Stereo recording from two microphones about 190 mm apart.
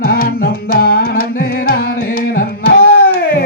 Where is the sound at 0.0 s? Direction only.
50° left (ahead or behind).